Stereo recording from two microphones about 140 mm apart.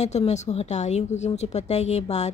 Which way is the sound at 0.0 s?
55° left (ahead or behind).